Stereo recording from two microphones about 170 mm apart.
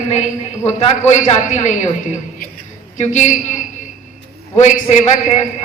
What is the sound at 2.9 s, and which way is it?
Speech, 45° left (ahead or behind).